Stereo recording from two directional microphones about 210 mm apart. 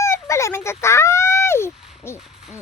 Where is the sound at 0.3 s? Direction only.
15° left (ahead or behind).